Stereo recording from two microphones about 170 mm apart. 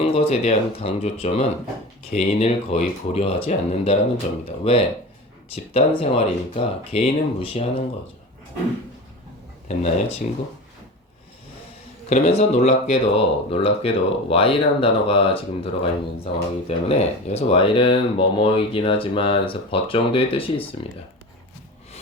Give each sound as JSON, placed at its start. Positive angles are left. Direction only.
{"t": 0.0, "sound": "speech", "side_deg": 35}
{"t": 9.6, "sound": "speech", "side_deg": 40}
{"t": 12.0, "sound": "speech", "side_deg": 40}